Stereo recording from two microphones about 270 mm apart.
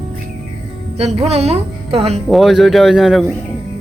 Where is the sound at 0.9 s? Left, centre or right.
Right.